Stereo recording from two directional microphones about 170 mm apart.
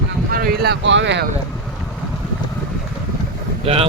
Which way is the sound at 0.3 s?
60° right (ahead or behind).